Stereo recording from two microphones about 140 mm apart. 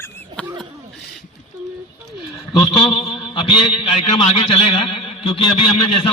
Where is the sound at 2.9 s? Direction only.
35° left (ahead or behind).